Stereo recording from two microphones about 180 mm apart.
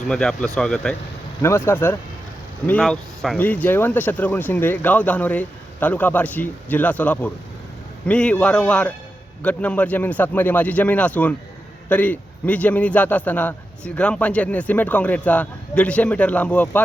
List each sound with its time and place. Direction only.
0.1 s speech: 5° left (ahead or behind)
1.4 s a man's voice: 15° left (ahead or behind)